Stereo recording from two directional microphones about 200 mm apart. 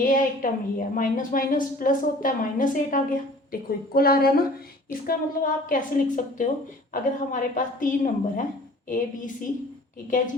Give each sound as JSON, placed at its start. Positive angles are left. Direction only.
{"t": 0.0, "sound": "a woman's voice", "side_deg": 40}